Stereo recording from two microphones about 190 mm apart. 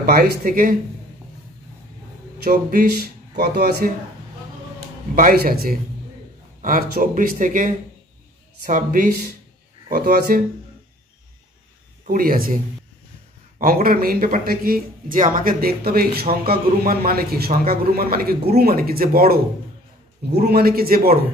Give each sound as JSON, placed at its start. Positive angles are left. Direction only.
{"t": 0.0, "sound": "speech", "side_deg": -55}
{"t": 2.4, "sound": "speech", "side_deg": -50}
{"t": 5.1, "sound": "speech", "side_deg": -50}
{"t": 12.0, "sound": "speech", "side_deg": -45}
{"t": 13.6, "sound": "speech", "side_deg": -50}